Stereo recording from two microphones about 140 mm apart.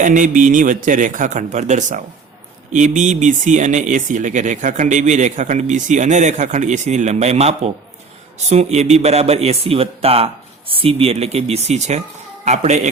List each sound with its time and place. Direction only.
0.0 s a man's voice: 70° right (ahead or behind)